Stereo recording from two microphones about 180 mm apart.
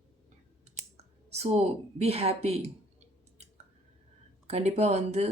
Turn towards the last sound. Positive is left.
turn(degrees=-35)  # may be behind; listen again after turning